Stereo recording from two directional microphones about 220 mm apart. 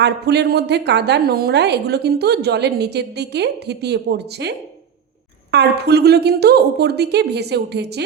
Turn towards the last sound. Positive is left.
turn(degrees=-50)  # may be behind; listen again after turning